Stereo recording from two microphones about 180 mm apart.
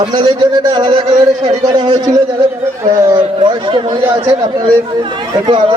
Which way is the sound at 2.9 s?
20° right (ahead or behind).